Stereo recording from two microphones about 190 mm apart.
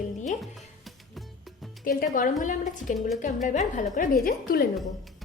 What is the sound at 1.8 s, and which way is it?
A woman's voice, 50° left (ahead or behind).